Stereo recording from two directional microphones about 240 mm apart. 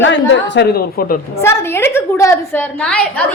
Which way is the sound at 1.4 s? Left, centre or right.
Centre.